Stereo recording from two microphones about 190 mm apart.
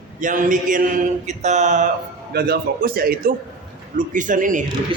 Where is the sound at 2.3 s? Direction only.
55° right (ahead or behind).